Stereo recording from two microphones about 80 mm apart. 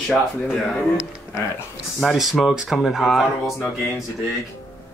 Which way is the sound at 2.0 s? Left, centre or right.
Centre.